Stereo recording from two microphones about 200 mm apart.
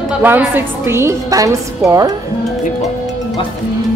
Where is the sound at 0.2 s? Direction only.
10° right (ahead or behind).